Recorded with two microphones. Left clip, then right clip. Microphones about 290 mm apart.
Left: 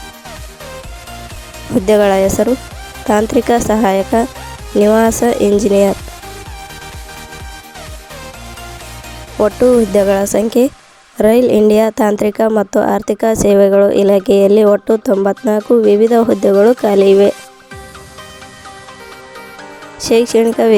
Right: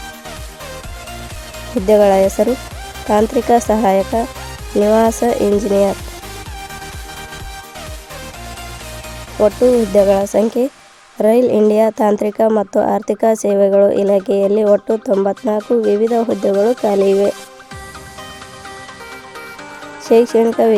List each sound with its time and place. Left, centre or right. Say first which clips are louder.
1.9 s a woman's voice: even; left
9.9 s a woman's voice: even; left
20.1 s speech: even; left